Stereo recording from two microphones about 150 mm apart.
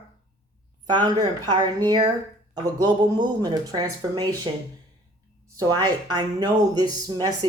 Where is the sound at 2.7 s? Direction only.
30° right (ahead or behind).